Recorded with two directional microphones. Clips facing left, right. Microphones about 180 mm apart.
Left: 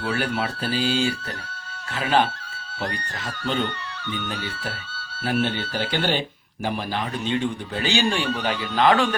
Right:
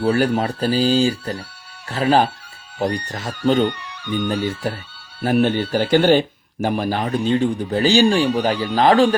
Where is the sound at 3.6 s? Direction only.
15° right (ahead or behind).